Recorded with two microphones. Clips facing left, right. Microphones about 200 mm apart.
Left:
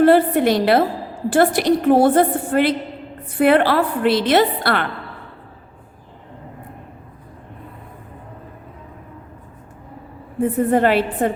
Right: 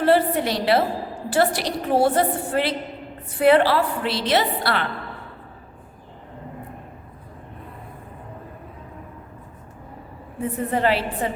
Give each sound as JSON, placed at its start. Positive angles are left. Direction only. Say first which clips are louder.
{"t": 0.0, "sound": "a woman's voice", "louder": "left 6 dB", "side_deg": 50}
{"t": 10.7, "sound": "a woman's voice", "louder": "left 3 dB", "side_deg": 55}